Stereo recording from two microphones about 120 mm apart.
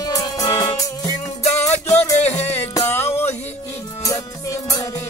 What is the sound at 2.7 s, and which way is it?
Music, 20° left (ahead or behind).